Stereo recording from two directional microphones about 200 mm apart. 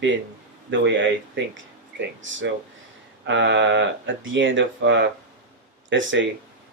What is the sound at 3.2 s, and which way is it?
Speech, 65° right (ahead or behind).